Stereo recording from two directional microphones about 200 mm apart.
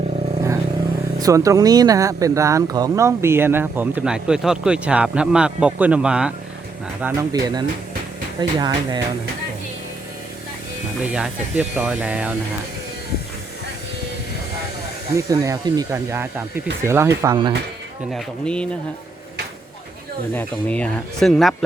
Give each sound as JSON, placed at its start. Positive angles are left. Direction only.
{"t": 1.2, "sound": "speech", "side_deg": -15}
{"t": 7.0, "sound": "speech", "side_deg": -15}
{"t": 11.0, "sound": "speech", "side_deg": -5}
{"t": 15.1, "sound": "speech", "side_deg": -15}
{"t": 18.1, "sound": "speech", "side_deg": 5}
{"t": 20.3, "sound": "speech", "side_deg": 5}